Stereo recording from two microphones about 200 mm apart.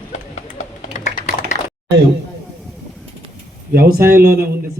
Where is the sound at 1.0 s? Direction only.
35° left (ahead or behind).